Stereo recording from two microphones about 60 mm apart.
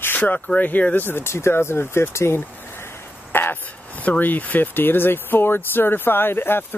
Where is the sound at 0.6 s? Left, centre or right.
Left.